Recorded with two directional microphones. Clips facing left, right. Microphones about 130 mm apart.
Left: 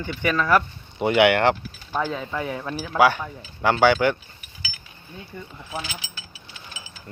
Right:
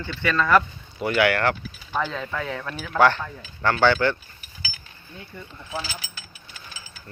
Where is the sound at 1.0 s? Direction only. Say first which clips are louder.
Left 4 dB; 20° left (ahead or behind).